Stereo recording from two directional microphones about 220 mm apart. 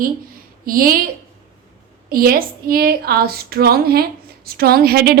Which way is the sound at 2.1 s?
40° right (ahead or behind).